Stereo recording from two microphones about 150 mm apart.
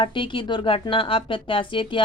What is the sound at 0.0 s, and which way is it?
A woman's voice, 35° left (ahead or behind).